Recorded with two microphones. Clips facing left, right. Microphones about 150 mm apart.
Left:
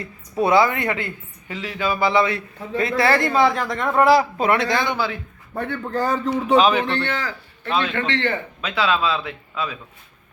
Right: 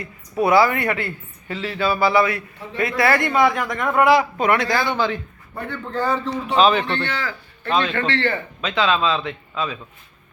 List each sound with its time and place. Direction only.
0.0 s speech: 25° left (ahead or behind)
4.9 s speech: 5° left (ahead or behind)
5.5 s a man's voice: 60° left (ahead or behind)
5.9 s a man's voice: 40° left (ahead or behind)
6.6 s speech: 15° left (ahead or behind)
7.1 s a man's voice: 40° left (ahead or behind)
7.7 s speech: 5° left (ahead or behind)
7.9 s speech: 20° left (ahead or behind)
8.6 s speech: 10° left (ahead or behind)